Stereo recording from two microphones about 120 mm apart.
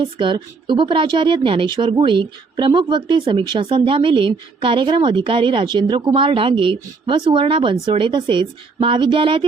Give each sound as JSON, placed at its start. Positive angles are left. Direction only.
{"t": 0.0, "sound": "speech", "side_deg": -40}